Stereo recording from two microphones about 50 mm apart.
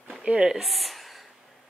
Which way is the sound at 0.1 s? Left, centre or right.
Centre.